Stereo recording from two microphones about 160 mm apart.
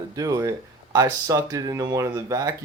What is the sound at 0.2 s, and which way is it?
Speech, 20° right (ahead or behind).